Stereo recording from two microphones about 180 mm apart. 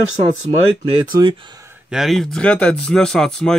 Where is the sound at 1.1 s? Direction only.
25° right (ahead or behind).